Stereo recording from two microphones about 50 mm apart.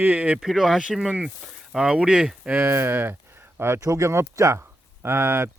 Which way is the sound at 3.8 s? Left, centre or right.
Right.